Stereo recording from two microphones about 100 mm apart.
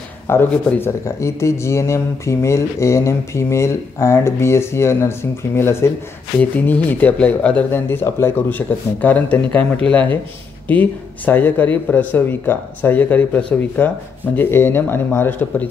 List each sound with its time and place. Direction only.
0.3 s speech: 20° left (ahead or behind)